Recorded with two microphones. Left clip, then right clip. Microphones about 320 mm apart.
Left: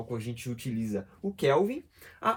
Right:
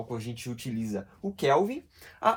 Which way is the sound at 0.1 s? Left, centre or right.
Centre.